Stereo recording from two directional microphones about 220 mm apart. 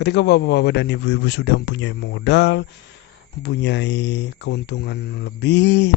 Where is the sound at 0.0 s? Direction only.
50° left (ahead or behind).